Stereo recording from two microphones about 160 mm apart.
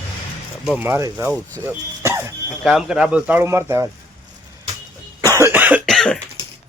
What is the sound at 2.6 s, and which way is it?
Speech, 5° right (ahead or behind).